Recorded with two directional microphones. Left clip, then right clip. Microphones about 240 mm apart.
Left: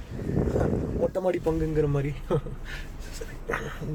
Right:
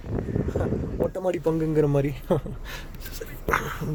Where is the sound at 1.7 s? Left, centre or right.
Right.